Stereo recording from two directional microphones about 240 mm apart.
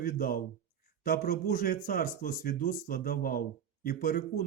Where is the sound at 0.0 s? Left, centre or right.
Left.